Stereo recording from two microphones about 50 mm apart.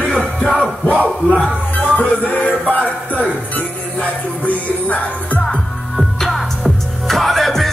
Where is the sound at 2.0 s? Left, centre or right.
Left.